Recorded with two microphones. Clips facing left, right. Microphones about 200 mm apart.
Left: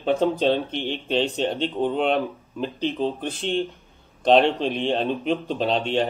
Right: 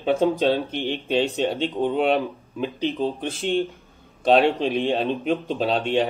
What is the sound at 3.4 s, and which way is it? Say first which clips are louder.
Speech: right 2 dB; 50° right (ahead or behind).